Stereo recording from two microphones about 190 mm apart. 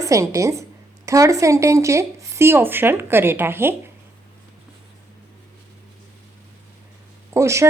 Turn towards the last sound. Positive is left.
turn(degrees=-15)  # may be behind; listen again after turning